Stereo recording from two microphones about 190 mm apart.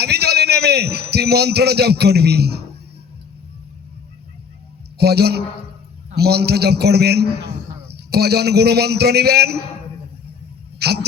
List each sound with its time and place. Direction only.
0.0 s a man's voice: 55° right (ahead or behind)
4.9 s a man's voice: 55° right (ahead or behind)
10.8 s speech: 60° right (ahead or behind)